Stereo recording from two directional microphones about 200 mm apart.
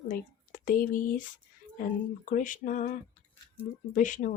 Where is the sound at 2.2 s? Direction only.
40° left (ahead or behind).